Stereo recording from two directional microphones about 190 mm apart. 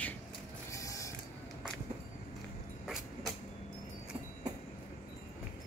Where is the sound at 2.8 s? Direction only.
Centre (ahead or behind).